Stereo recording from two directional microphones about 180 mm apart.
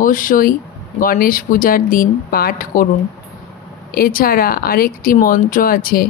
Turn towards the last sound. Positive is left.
turn(degrees=50)  # may be behind; listen again after turning